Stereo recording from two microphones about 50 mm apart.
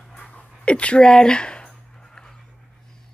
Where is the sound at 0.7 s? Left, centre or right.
Left.